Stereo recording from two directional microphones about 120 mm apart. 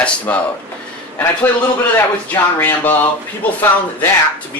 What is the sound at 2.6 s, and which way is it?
Speech, 15° left (ahead or behind).